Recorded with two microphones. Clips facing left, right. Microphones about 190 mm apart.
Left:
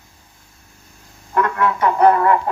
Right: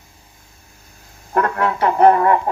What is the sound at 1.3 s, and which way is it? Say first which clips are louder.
Speech: even; 40° right (ahead or behind).